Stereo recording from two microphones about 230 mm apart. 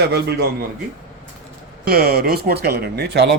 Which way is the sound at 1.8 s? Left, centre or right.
Right.